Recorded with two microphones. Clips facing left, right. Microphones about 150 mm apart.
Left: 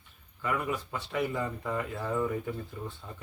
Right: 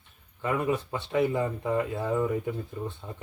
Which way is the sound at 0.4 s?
25° right (ahead or behind).